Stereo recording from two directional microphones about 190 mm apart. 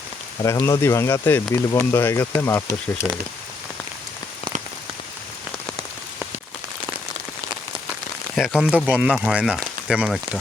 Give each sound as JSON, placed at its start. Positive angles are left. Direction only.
{"t": 0.4, "sound": "speech", "side_deg": 20}
{"t": 8.4, "sound": "speech", "side_deg": -5}